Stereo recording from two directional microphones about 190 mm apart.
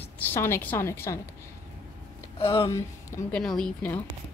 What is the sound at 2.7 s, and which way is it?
Speech, 15° left (ahead or behind).